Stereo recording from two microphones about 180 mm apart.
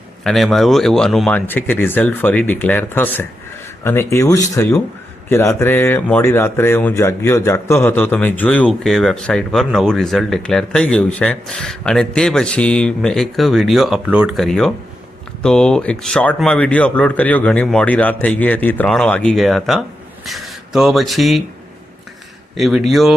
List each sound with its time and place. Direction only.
0.3 s speech: centre (ahead or behind)
22.5 s speech: centre (ahead or behind)